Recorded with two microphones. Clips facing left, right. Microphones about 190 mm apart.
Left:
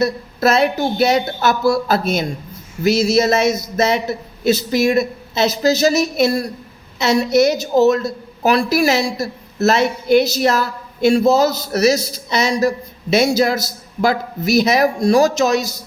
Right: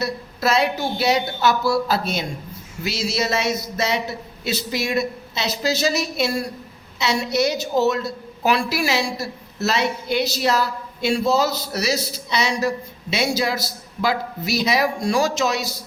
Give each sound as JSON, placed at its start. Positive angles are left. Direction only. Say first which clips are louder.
{"t": 0.0, "sound": "a woman's voice", "louder": "left 7 dB", "side_deg": 45}